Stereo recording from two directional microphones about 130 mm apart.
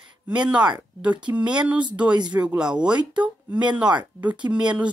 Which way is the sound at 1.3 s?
10° right (ahead or behind).